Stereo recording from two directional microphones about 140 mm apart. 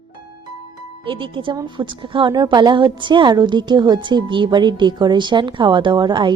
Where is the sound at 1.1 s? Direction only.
35° right (ahead or behind).